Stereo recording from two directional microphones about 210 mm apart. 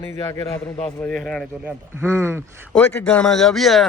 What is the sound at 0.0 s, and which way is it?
Speech, 10° left (ahead or behind).